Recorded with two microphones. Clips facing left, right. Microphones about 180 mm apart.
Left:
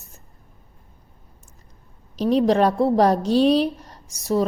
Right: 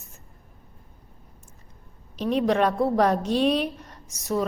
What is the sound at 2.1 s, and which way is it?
A woman's voice, 35° left (ahead or behind).